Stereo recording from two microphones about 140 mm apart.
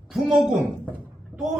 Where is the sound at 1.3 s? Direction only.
10° right (ahead or behind).